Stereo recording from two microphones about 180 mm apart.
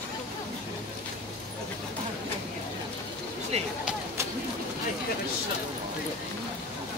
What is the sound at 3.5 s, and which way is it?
Speech, 35° right (ahead or behind).